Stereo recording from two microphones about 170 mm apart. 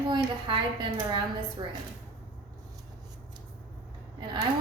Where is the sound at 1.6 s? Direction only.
25° right (ahead or behind).